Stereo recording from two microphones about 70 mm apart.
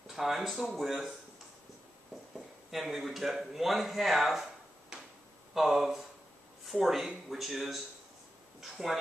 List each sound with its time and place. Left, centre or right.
0.0 s speech: centre
2.3 s a man's voice: centre